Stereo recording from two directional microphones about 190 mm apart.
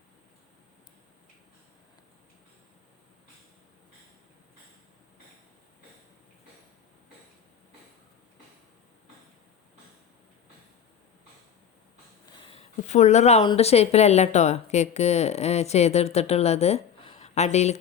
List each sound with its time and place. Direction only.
12.4 s a woman's voice: 30° left (ahead or behind)